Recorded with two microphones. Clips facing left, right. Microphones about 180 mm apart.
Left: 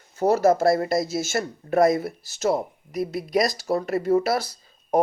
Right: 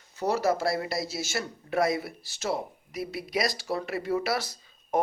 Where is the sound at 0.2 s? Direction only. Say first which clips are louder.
Left 7 dB; 50° left (ahead or behind).